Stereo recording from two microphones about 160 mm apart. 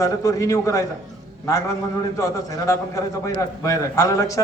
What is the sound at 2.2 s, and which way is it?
A man's voice, 20° left (ahead or behind).